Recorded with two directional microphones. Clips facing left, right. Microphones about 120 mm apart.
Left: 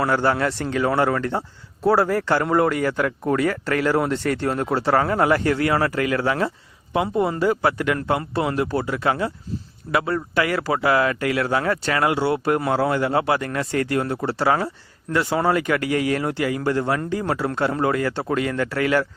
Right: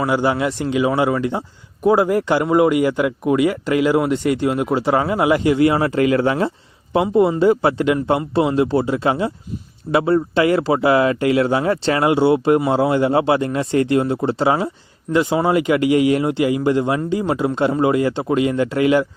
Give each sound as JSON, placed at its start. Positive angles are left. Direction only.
{"t": 0.0, "sound": "a man's voice", "side_deg": -10}